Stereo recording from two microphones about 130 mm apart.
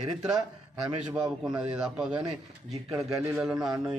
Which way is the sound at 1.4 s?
5° right (ahead or behind).